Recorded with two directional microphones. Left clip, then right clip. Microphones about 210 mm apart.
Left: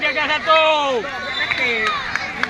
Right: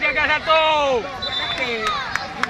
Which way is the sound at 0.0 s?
40° left (ahead or behind).